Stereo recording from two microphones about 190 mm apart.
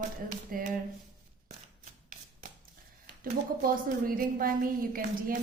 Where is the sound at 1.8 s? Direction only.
45° right (ahead or behind).